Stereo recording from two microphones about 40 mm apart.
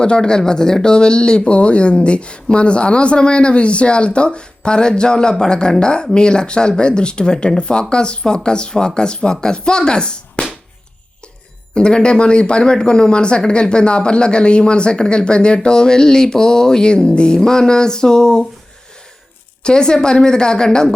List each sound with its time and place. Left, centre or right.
0.0 s speech: left
11.7 s speech: left
19.6 s speech: centre